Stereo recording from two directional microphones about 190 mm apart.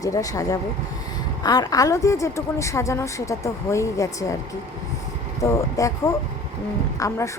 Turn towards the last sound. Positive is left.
turn(degrees=15)  # may be behind; listen again after turning